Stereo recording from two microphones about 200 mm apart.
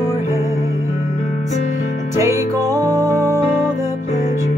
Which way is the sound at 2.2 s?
15° right (ahead or behind).